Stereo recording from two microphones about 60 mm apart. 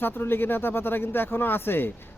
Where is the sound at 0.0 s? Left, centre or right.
Left.